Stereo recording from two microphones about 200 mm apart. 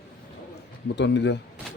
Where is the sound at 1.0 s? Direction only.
60° left (ahead or behind).